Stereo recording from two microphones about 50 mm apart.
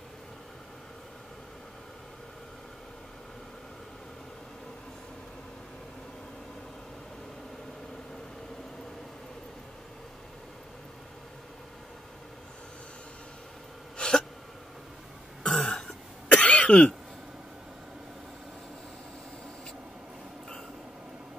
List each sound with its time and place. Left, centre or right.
13.9 s hiccup: centre
15.4 s throat clearing: centre
16.3 s cough: left